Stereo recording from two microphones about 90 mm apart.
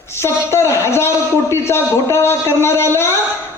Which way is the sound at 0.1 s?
30° left (ahead or behind).